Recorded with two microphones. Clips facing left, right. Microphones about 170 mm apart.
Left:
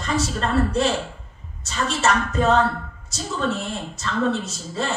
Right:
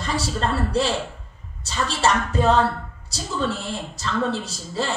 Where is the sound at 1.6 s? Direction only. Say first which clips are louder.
Even; 30° right (ahead or behind).